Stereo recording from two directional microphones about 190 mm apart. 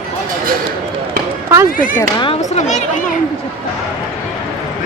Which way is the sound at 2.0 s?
25° left (ahead or behind).